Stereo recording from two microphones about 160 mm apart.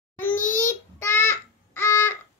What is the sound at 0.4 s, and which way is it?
Babbling, 55° left (ahead or behind).